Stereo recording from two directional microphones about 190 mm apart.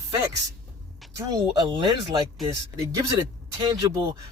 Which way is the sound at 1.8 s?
25° right (ahead or behind).